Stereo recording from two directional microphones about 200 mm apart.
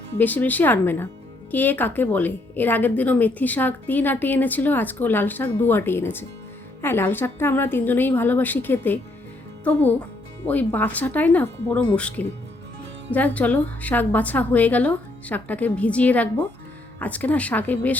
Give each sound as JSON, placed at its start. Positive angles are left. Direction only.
{"t": 0.2, "sound": "speech", "side_deg": 10}
{"t": 10.4, "sound": "speech", "side_deg": 10}